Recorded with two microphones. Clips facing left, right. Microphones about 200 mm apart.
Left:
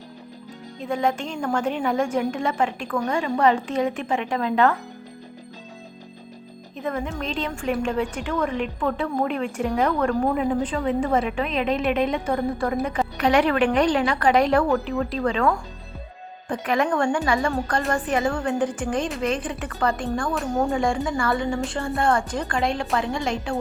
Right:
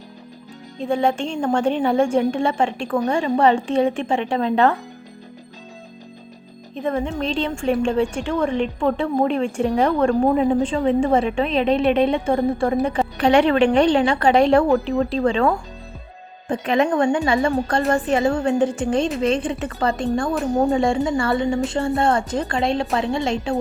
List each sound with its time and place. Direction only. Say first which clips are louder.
0.8 s a woman's voice: right 4 dB; 30° right (ahead or behind)
6.8 s a woman's voice: right 5 dB; 30° right (ahead or behind)